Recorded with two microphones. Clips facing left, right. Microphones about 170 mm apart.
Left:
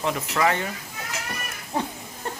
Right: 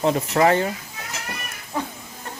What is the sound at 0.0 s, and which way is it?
Speech, 35° right (ahead or behind).